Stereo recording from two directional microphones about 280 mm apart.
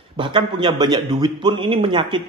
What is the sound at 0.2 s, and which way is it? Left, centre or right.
Mantra, centre.